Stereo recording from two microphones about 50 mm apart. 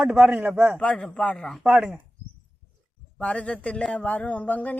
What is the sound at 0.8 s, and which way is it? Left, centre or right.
Speech, left.